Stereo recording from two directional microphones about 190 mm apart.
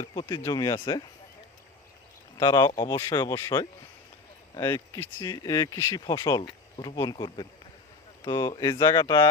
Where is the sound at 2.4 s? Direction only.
20° left (ahead or behind).